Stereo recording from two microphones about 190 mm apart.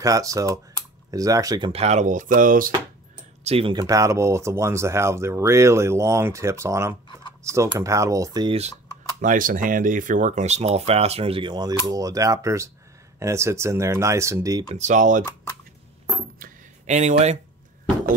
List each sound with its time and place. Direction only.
0.0 s speech: 15° right (ahead or behind)
1.7 s speech: 35° right (ahead or behind)
3.4 s speech: 30° right (ahead or behind)
3.8 s speech: 15° right (ahead or behind)
9.2 s speech: 45° right (ahead or behind); by 14.6 s 15° right (ahead or behind)
14.7 s speech: 40° right (ahead or behind)
16.3 s a sound: 40° right (ahead or behind)